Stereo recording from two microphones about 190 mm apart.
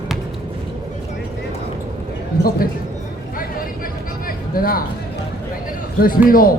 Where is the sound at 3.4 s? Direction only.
50° left (ahead or behind).